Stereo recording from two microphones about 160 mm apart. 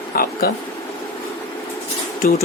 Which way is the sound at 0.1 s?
70° left (ahead or behind).